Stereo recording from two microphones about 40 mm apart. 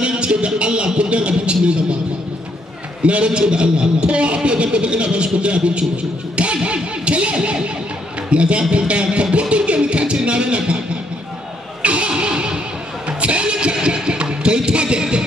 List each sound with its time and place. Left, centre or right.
0.0 s music: right
0.9 s a sound: right
3.1 s a man's voice: right
6.3 s music: right
8.3 s a man's voice: right
8.7 s music: right
11.8 s music: right